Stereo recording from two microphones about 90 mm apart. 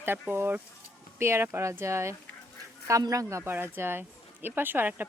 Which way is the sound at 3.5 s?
25° right (ahead or behind).